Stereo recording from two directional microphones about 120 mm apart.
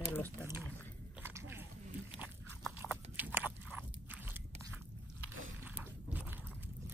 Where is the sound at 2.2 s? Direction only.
15° right (ahead or behind).